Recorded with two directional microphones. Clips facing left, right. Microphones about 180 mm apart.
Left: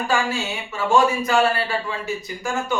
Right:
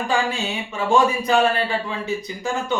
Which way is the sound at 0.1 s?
15° right (ahead or behind).